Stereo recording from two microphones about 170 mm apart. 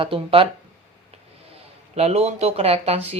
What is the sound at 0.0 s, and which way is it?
Speech, 30° right (ahead or behind).